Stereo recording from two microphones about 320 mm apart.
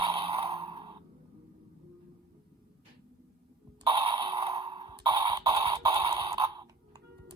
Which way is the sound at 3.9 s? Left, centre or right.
Centre.